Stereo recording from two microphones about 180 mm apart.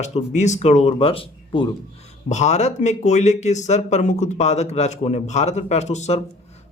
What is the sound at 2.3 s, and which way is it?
A man's voice, 40° left (ahead or behind).